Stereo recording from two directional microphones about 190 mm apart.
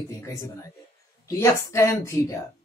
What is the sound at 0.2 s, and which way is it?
Speech, 15° left (ahead or behind).